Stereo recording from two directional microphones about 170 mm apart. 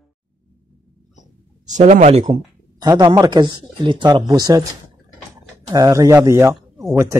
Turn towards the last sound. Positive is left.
turn(degrees=-20)  # may be behind; listen again after turning